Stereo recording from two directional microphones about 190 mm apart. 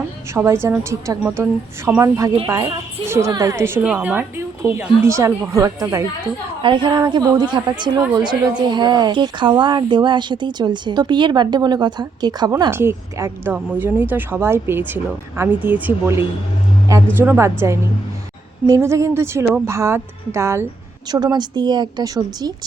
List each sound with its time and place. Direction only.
0.3 s a woman's voice: 15° right (ahead or behind)
18.6 s a woman's voice: 15° right (ahead or behind)